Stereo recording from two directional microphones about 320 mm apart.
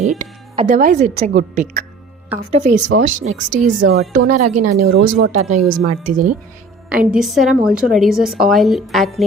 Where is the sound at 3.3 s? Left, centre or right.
Right.